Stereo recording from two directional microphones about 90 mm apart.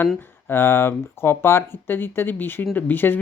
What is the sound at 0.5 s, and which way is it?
Speech, 25° left (ahead or behind).